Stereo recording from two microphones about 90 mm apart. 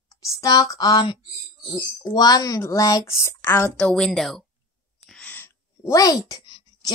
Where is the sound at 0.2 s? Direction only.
40° left (ahead or behind).